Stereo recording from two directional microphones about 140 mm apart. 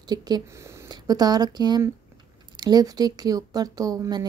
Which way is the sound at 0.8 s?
30° right (ahead or behind).